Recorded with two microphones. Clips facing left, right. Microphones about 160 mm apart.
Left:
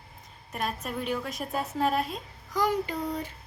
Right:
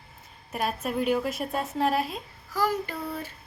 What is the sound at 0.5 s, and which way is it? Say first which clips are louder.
A woman's voice: right 4 dB; 5° right (ahead or behind).